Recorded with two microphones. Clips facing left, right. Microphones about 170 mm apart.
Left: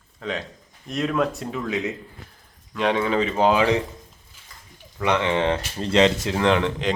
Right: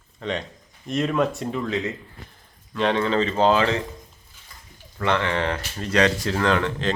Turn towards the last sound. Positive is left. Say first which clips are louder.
# left 2 dB
turn(degrees=20)  # may be behind; listen again after turning